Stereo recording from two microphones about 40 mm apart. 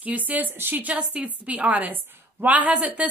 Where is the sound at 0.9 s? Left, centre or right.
Right.